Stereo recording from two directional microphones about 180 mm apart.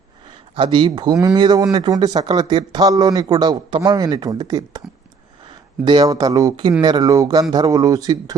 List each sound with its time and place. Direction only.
0.5 s speech: 30° right (ahead or behind)
5.8 s speech: 25° right (ahead or behind)